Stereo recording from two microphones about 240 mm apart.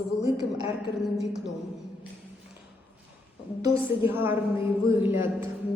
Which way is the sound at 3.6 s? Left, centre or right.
Centre.